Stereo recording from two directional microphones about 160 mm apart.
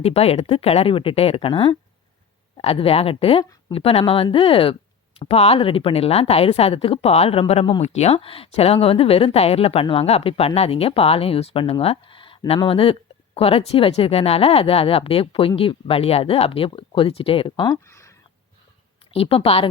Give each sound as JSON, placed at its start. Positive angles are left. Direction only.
{"t": 0.0, "sound": "speech", "side_deg": 40}
{"t": 17.8, "sound": "a sound", "side_deg": 15}
{"t": 19.1, "sound": "speech", "side_deg": 35}